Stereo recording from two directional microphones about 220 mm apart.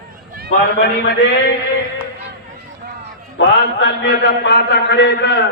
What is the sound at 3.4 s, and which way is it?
A man's voice, 50° left (ahead or behind).